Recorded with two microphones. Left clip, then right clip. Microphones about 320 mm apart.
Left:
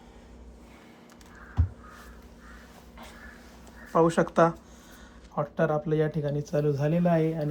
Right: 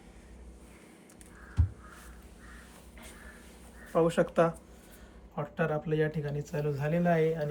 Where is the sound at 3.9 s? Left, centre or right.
Centre.